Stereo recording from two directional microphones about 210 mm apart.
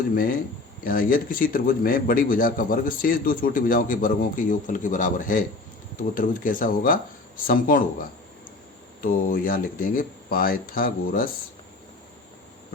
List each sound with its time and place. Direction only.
0.1 s a man's voice: 40° left (ahead or behind)